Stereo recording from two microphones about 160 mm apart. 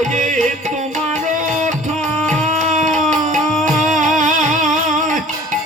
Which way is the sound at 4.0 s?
50° right (ahead or behind).